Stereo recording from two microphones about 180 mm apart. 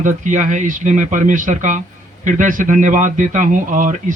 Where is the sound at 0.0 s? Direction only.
45° right (ahead or behind).